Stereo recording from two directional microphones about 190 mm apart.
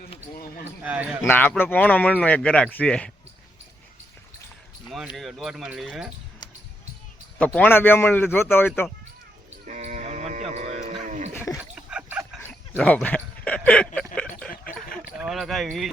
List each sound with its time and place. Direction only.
0.9 s speech: 10° right (ahead or behind)
1.2 s speech: 10° left (ahead or behind)
4.9 s speech: centre (ahead or behind)
7.3 s speech: 5° left (ahead or behind)
9.6 s sheep: 40° right (ahead or behind)
10.5 s hum: 35° right (ahead or behind)
11.0 s a sound: 40° right (ahead or behind)
11.7 s a sound: 5° right (ahead or behind)
12.4 s dog: 10° left (ahead or behind)
14.5 s a sound: 50° left (ahead or behind)
14.9 s speech: centre (ahead or behind)